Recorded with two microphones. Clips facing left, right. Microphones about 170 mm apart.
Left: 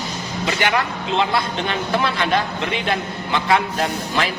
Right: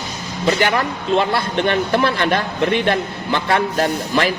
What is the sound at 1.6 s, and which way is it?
A man's voice, 55° right (ahead or behind).